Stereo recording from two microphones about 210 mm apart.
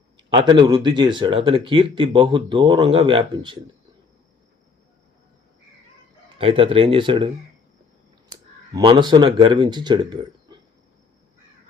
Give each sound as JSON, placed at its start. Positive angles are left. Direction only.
{"t": 0.2, "sound": "a sound", "side_deg": -25}
{"t": 0.6, "sound": "speech", "side_deg": -20}
{"t": 6.4, "sound": "speech", "side_deg": -25}
{"t": 8.7, "sound": "speech", "side_deg": -20}